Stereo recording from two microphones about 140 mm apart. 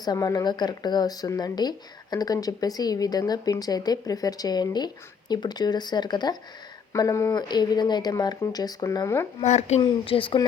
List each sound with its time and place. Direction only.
0.0 s a woman's voice: 25° left (ahead or behind)
9.4 s speech: 55° left (ahead or behind)
9.8 s speech: 40° left (ahead or behind)